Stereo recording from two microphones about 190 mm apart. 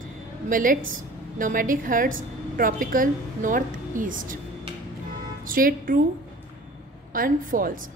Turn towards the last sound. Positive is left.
turn(degrees=-45)  # may be behind; listen again after turning